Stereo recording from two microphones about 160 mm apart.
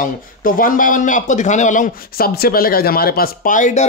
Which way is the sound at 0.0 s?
60° left (ahead or behind).